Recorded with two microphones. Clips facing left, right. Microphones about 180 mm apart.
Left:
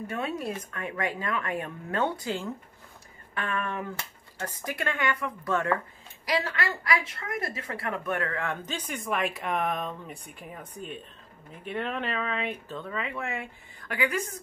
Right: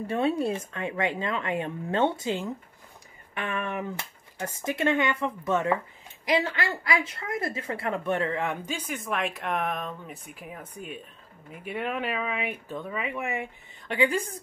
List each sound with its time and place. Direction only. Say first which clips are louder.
0.0 s a woman's voice: right 6 dB; 30° right (ahead or behind)